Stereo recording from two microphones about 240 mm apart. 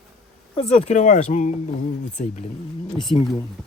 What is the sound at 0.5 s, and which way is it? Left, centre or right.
Speech, left.